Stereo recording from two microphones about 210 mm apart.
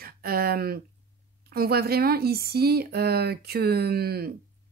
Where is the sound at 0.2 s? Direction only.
45° right (ahead or behind).